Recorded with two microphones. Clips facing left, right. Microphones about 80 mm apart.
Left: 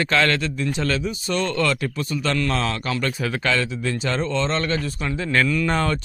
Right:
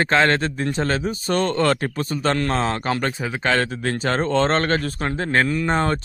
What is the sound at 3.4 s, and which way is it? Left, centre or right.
A man's voice, right.